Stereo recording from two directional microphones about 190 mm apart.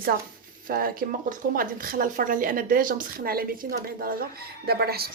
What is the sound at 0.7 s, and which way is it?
A woman's voice, 50° right (ahead or behind).